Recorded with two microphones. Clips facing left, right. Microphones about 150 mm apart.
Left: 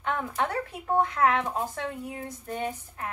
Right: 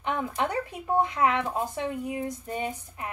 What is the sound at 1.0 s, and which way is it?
Speech, 15° right (ahead or behind).